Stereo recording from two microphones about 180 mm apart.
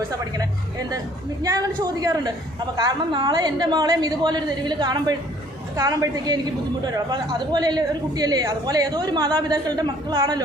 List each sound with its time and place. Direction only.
1.5 s speech: 20° right (ahead or behind)